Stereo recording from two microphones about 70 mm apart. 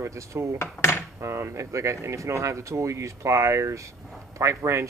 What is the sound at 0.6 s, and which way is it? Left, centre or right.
Cutlery, left.